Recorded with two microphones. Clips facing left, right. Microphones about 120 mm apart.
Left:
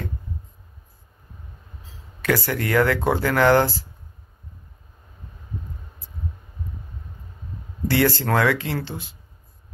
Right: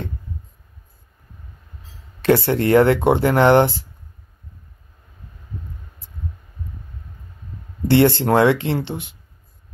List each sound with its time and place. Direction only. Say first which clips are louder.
2.2 s speech: right 7 dB; 25° right (ahead or behind)
7.9 s speech: right 6 dB; 25° right (ahead or behind)